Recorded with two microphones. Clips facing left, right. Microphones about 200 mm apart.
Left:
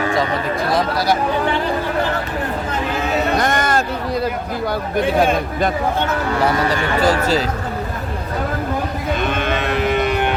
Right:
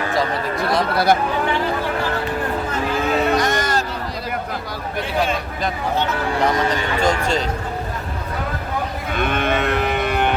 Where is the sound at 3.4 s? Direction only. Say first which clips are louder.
Left 2 dB; 55° left (ahead or behind).